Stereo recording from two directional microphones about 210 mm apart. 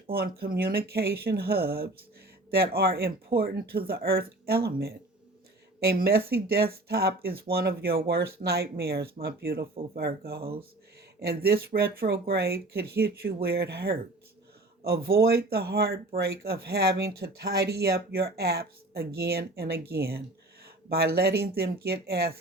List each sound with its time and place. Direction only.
0.1 s speech: 45° right (ahead or behind)